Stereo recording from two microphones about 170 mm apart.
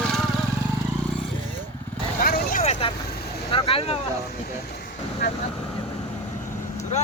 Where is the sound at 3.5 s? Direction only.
35° left (ahead or behind).